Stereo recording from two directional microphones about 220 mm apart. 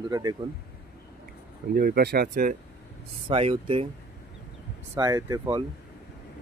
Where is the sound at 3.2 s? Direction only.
25° right (ahead or behind).